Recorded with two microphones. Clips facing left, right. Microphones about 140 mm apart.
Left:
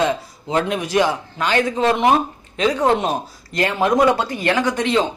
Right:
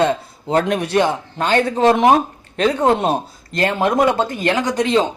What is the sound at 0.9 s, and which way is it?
Speech, 30° right (ahead or behind).